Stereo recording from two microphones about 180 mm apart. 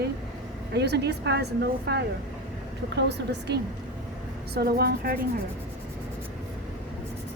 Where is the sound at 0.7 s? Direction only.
65° right (ahead or behind).